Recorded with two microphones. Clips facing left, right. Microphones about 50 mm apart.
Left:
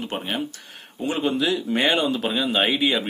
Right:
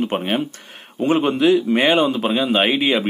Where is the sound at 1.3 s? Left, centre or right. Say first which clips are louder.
Right 8 dB; right.